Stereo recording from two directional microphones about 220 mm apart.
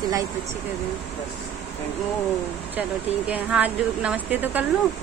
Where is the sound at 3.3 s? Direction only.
5° right (ahead or behind).